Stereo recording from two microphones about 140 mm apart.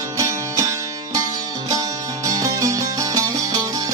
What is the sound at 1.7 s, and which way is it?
Music, 25° right (ahead or behind).